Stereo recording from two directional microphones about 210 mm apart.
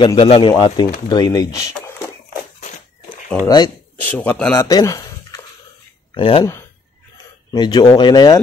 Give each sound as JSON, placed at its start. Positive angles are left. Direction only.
{"t": 0.0, "sound": "speech", "side_deg": 25}
{"t": 3.4, "sound": "speech", "side_deg": 15}
{"t": 4.1, "sound": "speech", "side_deg": 5}
{"t": 6.1, "sound": "speech", "side_deg": 25}
{"t": 7.5, "sound": "speech", "side_deg": 20}